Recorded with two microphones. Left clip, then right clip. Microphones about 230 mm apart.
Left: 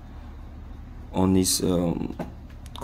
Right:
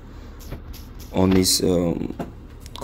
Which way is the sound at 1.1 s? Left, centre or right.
Centre.